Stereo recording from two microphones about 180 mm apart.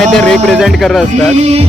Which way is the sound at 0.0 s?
5° left (ahead or behind).